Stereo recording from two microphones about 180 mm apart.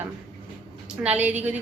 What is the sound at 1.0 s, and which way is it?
Speech, 5° right (ahead or behind).